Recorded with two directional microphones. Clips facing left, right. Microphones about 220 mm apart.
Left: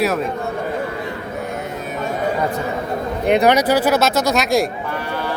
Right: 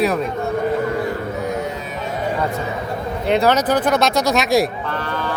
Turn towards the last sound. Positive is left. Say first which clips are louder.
# even
turn(degrees=10)  # may be behind; listen again after turning